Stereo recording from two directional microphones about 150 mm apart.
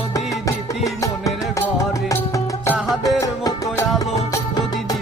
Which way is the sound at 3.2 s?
20° left (ahead or behind).